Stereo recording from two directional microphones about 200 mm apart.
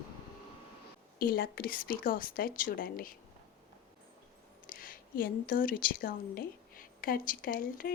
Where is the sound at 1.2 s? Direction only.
50° left (ahead or behind).